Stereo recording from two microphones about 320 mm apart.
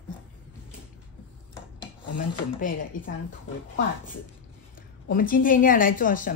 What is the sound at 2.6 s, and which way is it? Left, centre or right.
Speech, left.